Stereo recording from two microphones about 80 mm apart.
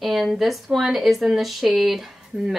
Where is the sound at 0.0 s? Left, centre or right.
Centre.